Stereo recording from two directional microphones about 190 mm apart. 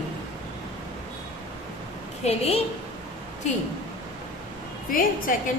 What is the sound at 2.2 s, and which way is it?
Speech, 35° left (ahead or behind).